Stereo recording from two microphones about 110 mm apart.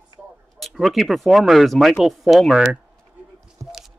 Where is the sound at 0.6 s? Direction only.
Centre (ahead or behind).